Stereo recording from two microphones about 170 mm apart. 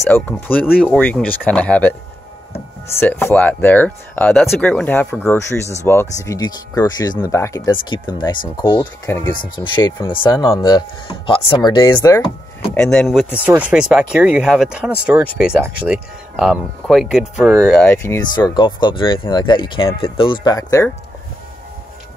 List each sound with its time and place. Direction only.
0.0 s speech: 10° left (ahead or behind); by 8.8 s 30° left (ahead or behind)
9.1 s speech: 15° left (ahead or behind)
9.8 s speech: 25° left (ahead or behind)
12.7 s speech: 5° left (ahead or behind)
17.7 s speech: 10° left (ahead or behind)
18.3 s speech: 25° left (ahead or behind)